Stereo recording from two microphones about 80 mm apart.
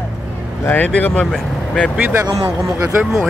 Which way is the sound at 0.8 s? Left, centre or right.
Centre.